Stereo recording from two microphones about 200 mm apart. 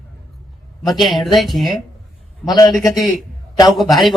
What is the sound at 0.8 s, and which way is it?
Speech, centre (ahead or behind).